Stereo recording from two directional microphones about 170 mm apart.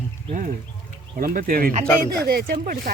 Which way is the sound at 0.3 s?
50° right (ahead or behind).